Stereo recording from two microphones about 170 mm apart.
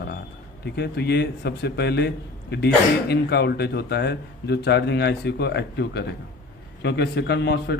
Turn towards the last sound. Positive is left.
turn(degrees=85)